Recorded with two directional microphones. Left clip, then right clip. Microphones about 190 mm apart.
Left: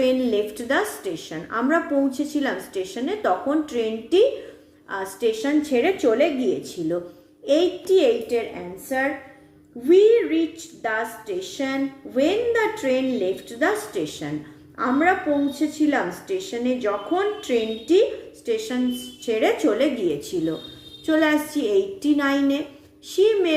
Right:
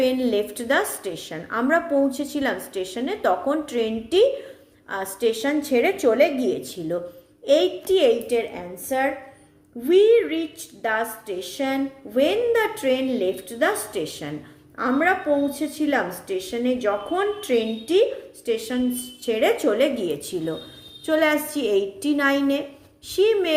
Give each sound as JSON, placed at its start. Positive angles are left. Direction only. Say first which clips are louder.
{"t": 0.0, "sound": "a woman's voice", "louder": "left 1 dB", "side_deg": -30}
{"t": 9.8, "sound": "a woman's voice", "louder": "left 1 dB", "side_deg": -30}